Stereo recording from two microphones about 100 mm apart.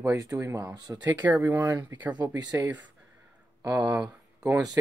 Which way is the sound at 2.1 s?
40° right (ahead or behind).